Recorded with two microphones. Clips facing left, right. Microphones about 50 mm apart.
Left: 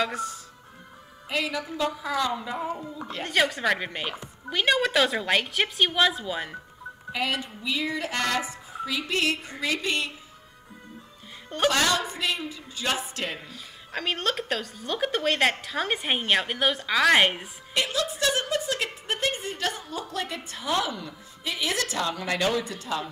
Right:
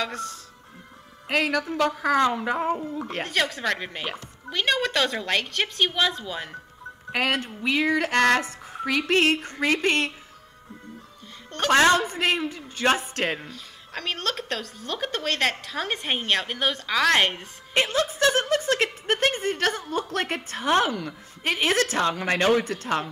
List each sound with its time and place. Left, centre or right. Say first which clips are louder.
0.0 s speech: left 2 dB; centre
1.3 s a woman's voice: right 5 dB; right
3.3 s speech: left 3 dB; centre
7.1 s a woman's voice: right 4 dB; right
11.7 s a man's voice: right 6 dB; right
13.5 s speech: left 1 dB; centre
17.7 s a woman's voice: right 4 dB; right